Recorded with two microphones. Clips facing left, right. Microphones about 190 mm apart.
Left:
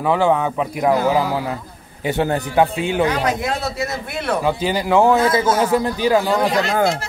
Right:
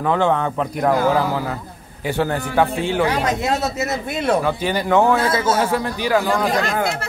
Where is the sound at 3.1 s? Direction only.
25° right (ahead or behind).